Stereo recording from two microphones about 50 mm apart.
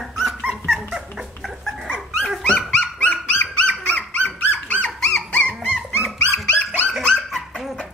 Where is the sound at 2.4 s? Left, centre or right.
Left.